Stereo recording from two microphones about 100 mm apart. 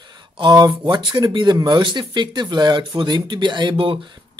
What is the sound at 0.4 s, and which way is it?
Speech, 45° right (ahead or behind).